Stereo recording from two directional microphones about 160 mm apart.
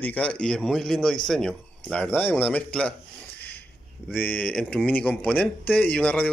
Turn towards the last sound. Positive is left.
turn(degrees=10)  # may be behind; listen again after turning